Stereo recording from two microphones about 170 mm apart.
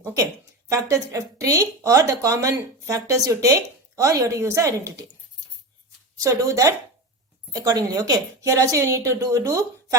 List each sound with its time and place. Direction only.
0.7 s speech: 20° right (ahead or behind)
6.2 s speech: 20° right (ahead or behind)